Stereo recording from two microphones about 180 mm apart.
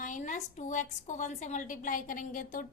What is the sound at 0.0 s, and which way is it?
A woman's voice, 45° left (ahead or behind).